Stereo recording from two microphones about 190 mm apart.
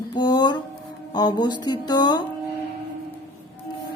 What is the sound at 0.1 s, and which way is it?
Music, 20° left (ahead or behind).